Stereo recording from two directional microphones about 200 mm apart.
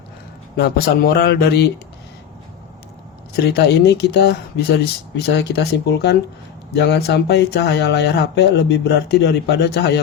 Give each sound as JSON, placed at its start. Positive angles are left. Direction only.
{"t": 0.5, "sound": "speech", "side_deg": 50}
{"t": 3.5, "sound": "speech", "side_deg": 60}